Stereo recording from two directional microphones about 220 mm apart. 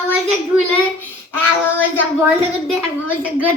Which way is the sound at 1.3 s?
10° left (ahead or behind).